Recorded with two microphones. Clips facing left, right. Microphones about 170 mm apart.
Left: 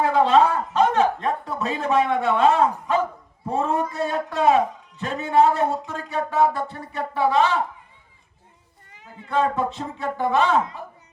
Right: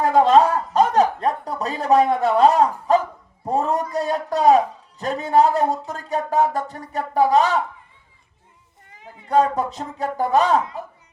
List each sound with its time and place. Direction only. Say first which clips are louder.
0.0 s chuckle: right 3 dB; 40° right (ahead or behind)
3.4 s speech: right 2 dB; 40° right (ahead or behind)
9.3 s speech: right 4 dB; 40° right (ahead or behind)